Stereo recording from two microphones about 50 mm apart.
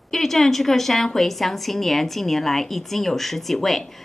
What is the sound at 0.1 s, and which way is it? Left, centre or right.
A woman's voice, centre.